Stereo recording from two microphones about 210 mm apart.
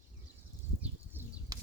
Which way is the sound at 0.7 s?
10° right (ahead or behind).